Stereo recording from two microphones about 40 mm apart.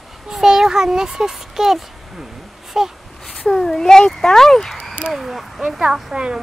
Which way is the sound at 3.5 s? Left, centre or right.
Centre.